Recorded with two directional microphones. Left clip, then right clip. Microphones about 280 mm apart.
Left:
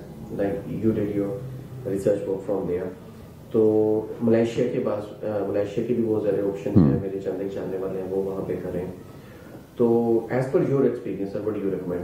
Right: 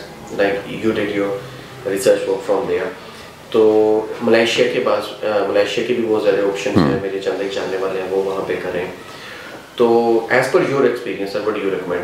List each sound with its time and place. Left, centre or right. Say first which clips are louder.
0.4 s a man's voice: right 9 dB; centre
2.3 s a man's voice: right 8 dB; centre
3.6 s speech: right 7 dB; right
4.3 s a man's voice: right 8 dB; centre
8.1 s speech: right 7 dB; right
8.5 s a man's voice: right 8 dB; centre
9.8 s speech: right 7 dB; right
10.2 s a man's voice: right 9 dB; centre